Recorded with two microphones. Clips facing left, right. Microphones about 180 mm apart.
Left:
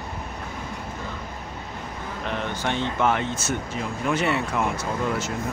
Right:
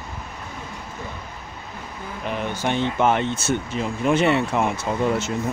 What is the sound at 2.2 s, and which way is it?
Speech, 10° right (ahead or behind).